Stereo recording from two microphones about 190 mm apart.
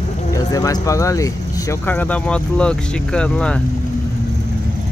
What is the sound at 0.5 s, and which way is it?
Speech, 20° left (ahead or behind).